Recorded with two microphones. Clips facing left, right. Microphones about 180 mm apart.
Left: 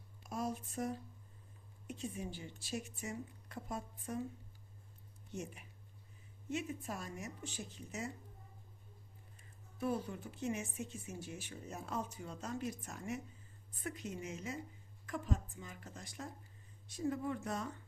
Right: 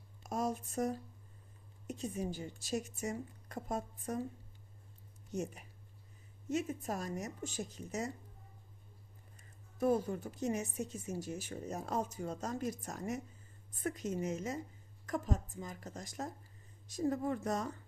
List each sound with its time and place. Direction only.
0.2 s a woman's voice: 45° right (ahead or behind)
5.3 s a woman's voice: 40° right (ahead or behind)
9.7 s a woman's voice: 45° right (ahead or behind)